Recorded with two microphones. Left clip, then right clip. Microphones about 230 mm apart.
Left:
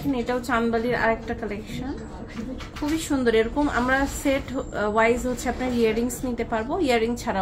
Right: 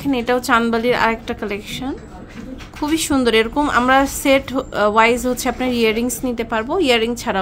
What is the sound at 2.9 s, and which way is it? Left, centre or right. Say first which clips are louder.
A woman's voice: right 6 dB; right.